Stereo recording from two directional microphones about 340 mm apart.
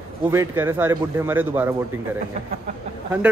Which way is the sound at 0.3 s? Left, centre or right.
Centre.